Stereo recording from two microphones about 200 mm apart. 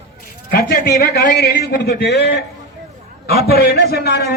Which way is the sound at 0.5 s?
55° left (ahead or behind).